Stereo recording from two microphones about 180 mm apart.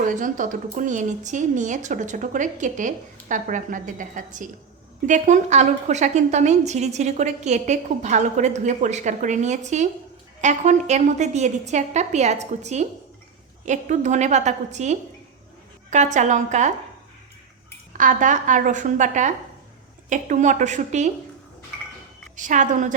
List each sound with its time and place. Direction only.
0.0 s a woman's voice: 45° right (ahead or behind)
17.9 s a woman's voice: 45° right (ahead or behind)
22.4 s a woman's voice: 45° right (ahead or behind)